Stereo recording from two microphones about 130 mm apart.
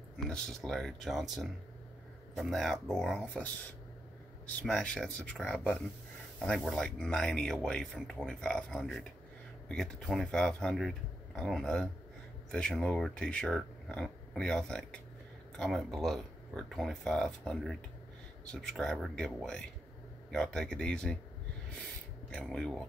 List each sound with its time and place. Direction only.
0.3 s speech: 5° left (ahead or behind)
4.5 s speech: 10° left (ahead or behind)
22.3 s speech: 10° left (ahead or behind)